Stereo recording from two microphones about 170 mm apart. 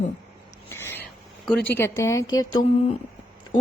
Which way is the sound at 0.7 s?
15° left (ahead or behind).